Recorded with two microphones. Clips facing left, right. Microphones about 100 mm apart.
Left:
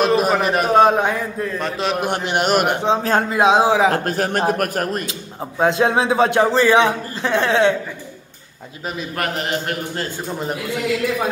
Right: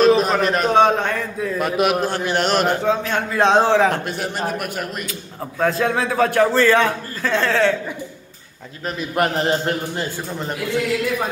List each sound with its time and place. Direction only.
0.0 s a man's voice: 5° left (ahead or behind)
1.4 s a man's voice: 10° right (ahead or behind)
2.0 s a man's voice: 20° left (ahead or behind)
3.0 s speech: 35° left (ahead or behind)
3.3 s a man's voice: 10° left (ahead or behind)
3.9 s a man's voice: 40° left (ahead or behind)
5.6 s a man's voice: 25° left (ahead or behind)
9.1 s a man's voice: 25° right (ahead or behind)